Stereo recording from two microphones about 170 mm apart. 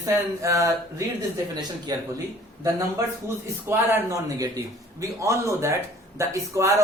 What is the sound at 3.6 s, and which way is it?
Speech, 15° right (ahead or behind).